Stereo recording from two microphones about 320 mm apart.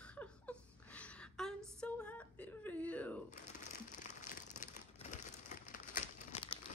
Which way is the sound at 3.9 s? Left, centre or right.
Left.